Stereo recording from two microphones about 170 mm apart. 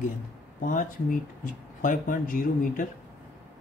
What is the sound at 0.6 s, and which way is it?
Speech, 50° left (ahead or behind).